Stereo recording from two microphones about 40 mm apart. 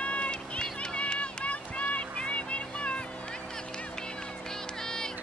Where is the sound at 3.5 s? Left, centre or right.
Centre.